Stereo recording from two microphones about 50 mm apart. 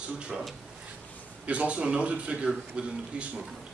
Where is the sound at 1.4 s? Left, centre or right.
Right.